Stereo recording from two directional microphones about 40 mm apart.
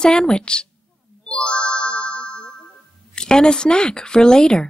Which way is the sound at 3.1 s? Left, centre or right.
Centre.